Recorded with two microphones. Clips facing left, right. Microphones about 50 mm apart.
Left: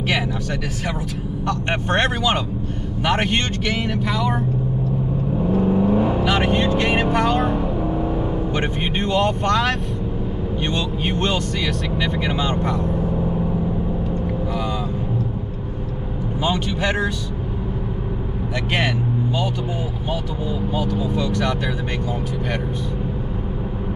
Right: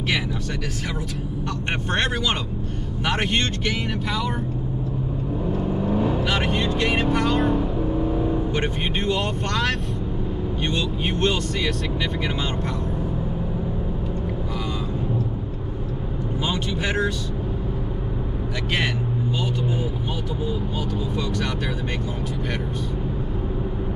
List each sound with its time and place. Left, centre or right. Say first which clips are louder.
2.0 s speech: left 4 dB; centre
5.7 s vehicle: left 4 dB; left
6.1 s vehicle: left 4 dB; centre
6.5 s speech: left 4 dB; centre
8.5 s speech: left 2 dB; left
9.1 s speech: left 6 dB; centre
12.2 s speech: left 4 dB; centre